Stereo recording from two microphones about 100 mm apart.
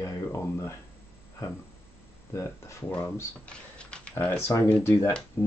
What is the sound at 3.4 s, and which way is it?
Typing, 10° left (ahead or behind).